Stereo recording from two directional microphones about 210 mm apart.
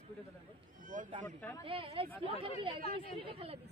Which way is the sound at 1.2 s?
10° left (ahead or behind).